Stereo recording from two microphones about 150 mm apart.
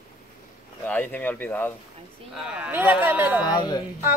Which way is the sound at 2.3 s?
5° right (ahead or behind).